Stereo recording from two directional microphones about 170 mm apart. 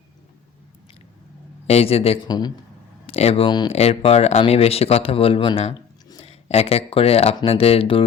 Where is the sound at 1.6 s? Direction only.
35° left (ahead or behind).